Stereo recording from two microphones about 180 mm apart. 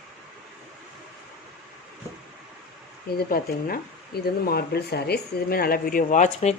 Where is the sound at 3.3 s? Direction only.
55° left (ahead or behind).